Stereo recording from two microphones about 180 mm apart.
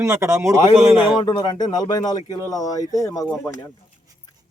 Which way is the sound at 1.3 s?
25° left (ahead or behind).